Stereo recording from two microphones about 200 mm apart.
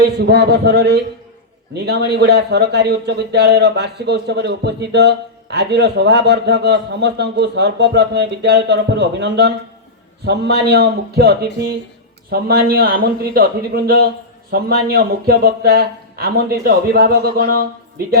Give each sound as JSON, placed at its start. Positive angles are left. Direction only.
{"t": 0.0, "sound": "speech", "side_deg": -55}